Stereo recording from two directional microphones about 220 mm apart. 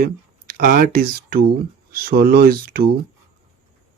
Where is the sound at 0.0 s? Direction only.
40° right (ahead or behind).